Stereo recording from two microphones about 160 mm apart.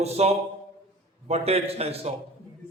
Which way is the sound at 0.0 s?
40° right (ahead or behind).